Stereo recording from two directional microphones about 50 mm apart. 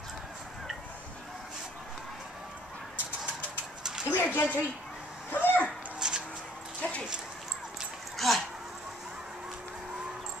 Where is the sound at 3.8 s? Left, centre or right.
Centre.